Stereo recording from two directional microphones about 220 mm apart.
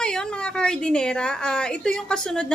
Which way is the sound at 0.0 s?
5° left (ahead or behind).